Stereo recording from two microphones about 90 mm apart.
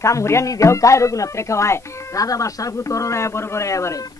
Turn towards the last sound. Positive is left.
turn(degrees=35)  # may be behind; listen again after turning